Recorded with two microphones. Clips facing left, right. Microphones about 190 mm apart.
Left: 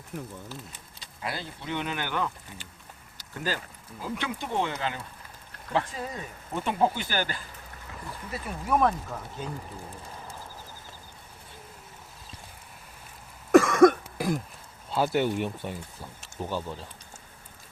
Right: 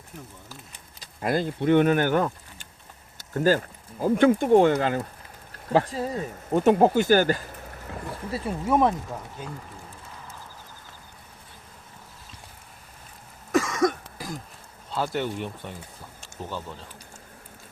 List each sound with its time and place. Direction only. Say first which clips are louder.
1.2 s speech: right 12 dB; 50° right (ahead or behind)
3.2 s a sound: right 11 dB; 45° right (ahead or behind)
4.0 s speech: right 14 dB; 45° right (ahead or behind)
5.6 s speech: right 6 dB; 35° right (ahead or behind)
8.3 s speech: right 4 dB; 25° right (ahead or behind)
13.5 s cough: left 6 dB; 60° left (ahead or behind)
14.9 s speech: left 3 dB; 10° left (ahead or behind)